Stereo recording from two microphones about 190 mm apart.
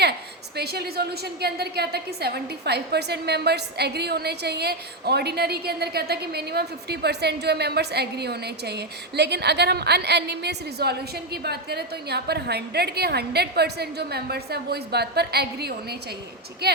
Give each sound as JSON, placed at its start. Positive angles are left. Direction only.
{"t": 0.5, "sound": "a woman's voice", "side_deg": -55}